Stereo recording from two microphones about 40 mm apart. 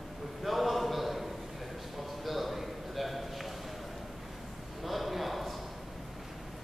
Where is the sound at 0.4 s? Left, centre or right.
Centre.